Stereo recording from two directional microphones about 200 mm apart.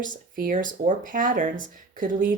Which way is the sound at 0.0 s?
45° right (ahead or behind).